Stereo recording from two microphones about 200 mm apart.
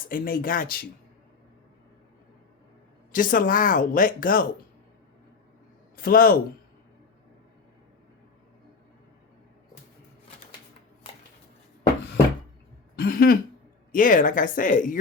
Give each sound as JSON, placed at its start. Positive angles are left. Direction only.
{"t": 0.1, "sound": "speech", "side_deg": 45}
{"t": 3.1, "sound": "speech", "side_deg": 40}
{"t": 6.0, "sound": "speech", "side_deg": 45}
{"t": 13.0, "sound": "throat clearing", "side_deg": 50}
{"t": 13.9, "sound": "speech", "side_deg": 40}